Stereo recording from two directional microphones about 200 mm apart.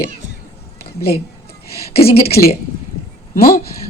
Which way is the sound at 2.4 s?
45° left (ahead or behind).